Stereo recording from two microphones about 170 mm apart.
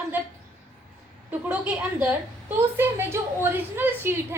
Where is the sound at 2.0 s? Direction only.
10° right (ahead or behind).